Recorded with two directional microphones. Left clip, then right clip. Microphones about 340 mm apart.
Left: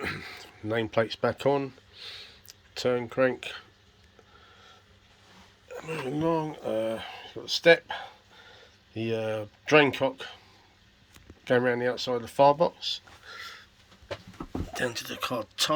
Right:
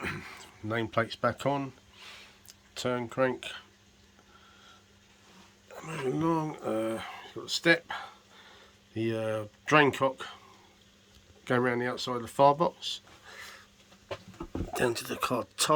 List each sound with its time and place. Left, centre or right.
0.0 s a sound: centre
5.6 s speech: centre
11.4 s speech: centre
14.7 s speech: centre